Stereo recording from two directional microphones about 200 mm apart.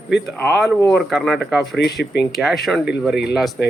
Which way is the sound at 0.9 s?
Centre (ahead or behind).